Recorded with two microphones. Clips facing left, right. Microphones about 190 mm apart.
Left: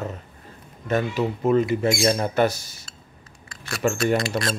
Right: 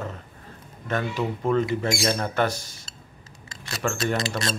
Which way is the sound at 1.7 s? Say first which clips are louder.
Left 4 dB; 10° left (ahead or behind).